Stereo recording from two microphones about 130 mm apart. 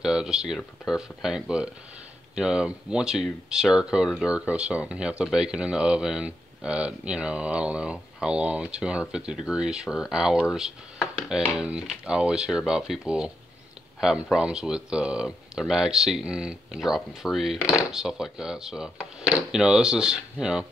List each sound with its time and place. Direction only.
0.0 s speech: 5° right (ahead or behind)
17.6 s speech: 25° left (ahead or behind)
17.9 s speech: 5° right (ahead or behind)